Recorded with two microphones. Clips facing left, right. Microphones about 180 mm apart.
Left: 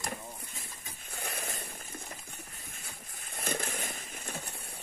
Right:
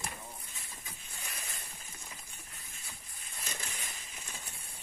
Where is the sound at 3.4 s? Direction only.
55° left (ahead or behind).